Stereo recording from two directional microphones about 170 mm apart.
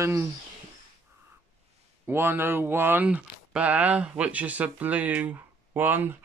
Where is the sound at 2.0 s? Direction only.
15° right (ahead or behind).